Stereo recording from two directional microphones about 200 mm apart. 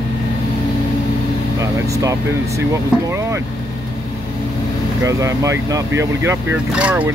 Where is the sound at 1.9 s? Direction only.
15° right (ahead or behind).